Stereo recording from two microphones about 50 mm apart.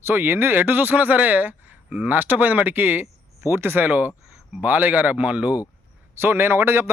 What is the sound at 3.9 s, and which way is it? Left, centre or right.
Speech, right.